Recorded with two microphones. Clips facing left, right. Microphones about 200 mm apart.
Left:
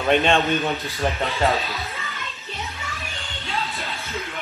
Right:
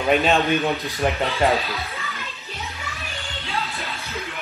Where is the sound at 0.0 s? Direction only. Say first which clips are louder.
Even; 5° right (ahead or behind).